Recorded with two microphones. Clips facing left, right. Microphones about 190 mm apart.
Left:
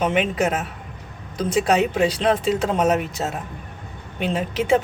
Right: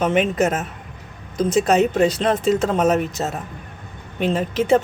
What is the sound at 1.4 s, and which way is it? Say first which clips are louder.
Speech: right 3 dB; 45° right (ahead or behind).